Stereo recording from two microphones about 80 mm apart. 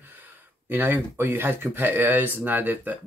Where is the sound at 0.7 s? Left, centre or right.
Right.